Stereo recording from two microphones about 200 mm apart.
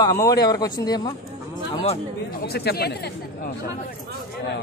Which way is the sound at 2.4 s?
50° left (ahead or behind).